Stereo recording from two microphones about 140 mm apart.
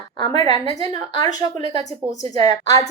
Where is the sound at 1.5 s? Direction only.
45° right (ahead or behind).